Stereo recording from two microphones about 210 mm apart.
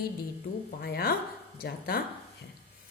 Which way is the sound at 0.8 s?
45° left (ahead or behind).